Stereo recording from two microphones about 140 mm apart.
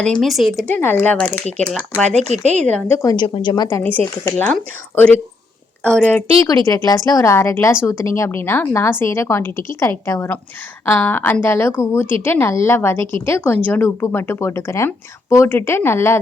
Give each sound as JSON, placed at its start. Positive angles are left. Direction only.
{"t": 0.0, "sound": "speech", "side_deg": 5}
{"t": 0.7, "sound": "speech", "side_deg": 15}
{"t": 2.1, "sound": "speech", "side_deg": -55}
{"t": 2.5, "sound": "speech", "side_deg": 5}
{"t": 2.9, "sound": "a woman's voice", "side_deg": 25}
{"t": 6.4, "sound": "a woman's voice", "side_deg": 25}